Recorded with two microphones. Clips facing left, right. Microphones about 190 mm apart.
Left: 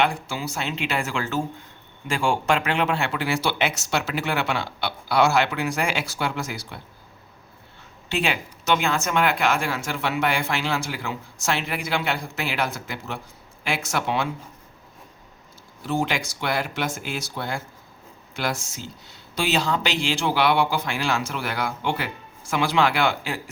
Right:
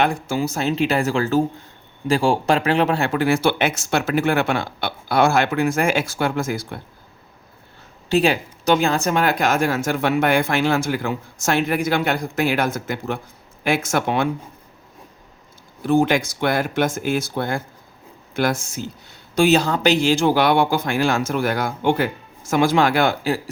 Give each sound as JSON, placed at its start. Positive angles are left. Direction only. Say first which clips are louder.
{"t": 0.0, "sound": "speech", "louder": "right 4 dB", "side_deg": -45}
{"t": 8.1, "sound": "speech", "louder": "right 8 dB", "side_deg": -40}
{"t": 15.9, "sound": "speech", "louder": "right 8 dB", "side_deg": -55}